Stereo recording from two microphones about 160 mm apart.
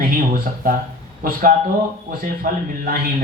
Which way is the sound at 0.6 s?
60° right (ahead or behind).